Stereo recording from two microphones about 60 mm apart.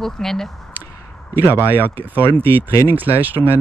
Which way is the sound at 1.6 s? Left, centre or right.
Right.